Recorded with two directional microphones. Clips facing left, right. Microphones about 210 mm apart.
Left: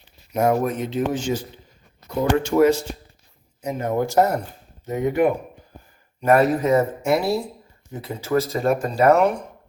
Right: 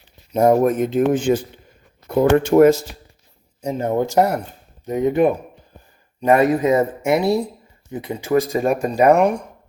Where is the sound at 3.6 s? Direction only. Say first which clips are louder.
Right 3 dB; 30° right (ahead or behind).